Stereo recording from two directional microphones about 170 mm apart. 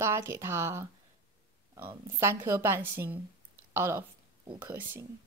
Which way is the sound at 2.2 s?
15° right (ahead or behind).